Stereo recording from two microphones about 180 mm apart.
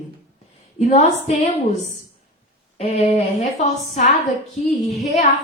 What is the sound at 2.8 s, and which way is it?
Speech, 40° left (ahead or behind).